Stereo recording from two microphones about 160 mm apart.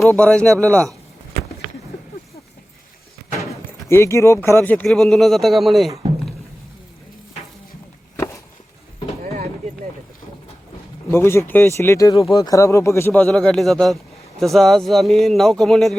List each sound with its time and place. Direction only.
0.1 s speech: 5° left (ahead or behind)
3.8 s speech: 15° left (ahead or behind); by 5.9 s centre (ahead or behind)
8.1 s a sound: 15° left (ahead or behind)
11.1 s speech: 15° left (ahead or behind)
13.2 s speech: 5° left (ahead or behind)